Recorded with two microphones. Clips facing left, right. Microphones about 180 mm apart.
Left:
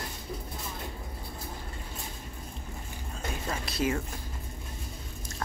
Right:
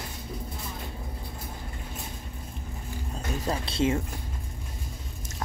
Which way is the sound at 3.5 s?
30° right (ahead or behind).